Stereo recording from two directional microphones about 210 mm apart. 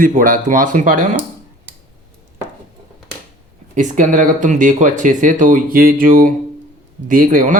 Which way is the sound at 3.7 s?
35° right (ahead or behind).